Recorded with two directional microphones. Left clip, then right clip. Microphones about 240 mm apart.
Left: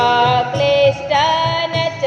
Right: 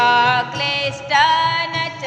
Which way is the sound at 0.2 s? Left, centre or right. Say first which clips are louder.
Left 2 dB; right.